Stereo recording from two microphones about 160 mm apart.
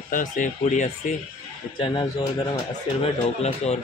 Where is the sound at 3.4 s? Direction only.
40° left (ahead or behind).